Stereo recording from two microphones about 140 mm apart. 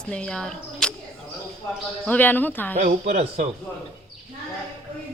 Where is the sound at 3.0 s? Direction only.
50° right (ahead or behind).